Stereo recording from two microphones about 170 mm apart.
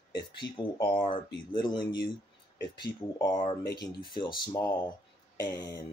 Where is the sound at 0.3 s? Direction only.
30° left (ahead or behind).